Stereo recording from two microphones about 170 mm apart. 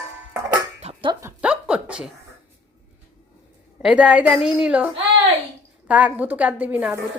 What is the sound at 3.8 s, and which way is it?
A woman's voice, 5° right (ahead or behind).